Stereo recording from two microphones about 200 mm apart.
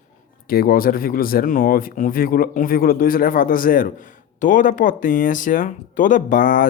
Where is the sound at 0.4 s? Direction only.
50° left (ahead or behind).